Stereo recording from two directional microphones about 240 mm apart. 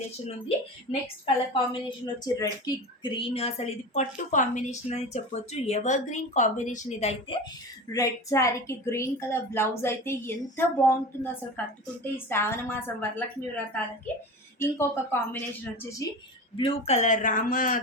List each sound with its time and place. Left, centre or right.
0.4 s a woman's voice: left
7.9 s a woman's voice: centre
14.6 s a woman's voice: centre
16.6 s speech: left